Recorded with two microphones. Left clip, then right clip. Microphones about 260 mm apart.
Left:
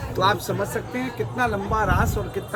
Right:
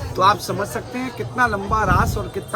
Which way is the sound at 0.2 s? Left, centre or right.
Right.